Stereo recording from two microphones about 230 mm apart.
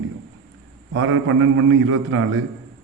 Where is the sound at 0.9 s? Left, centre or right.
Right.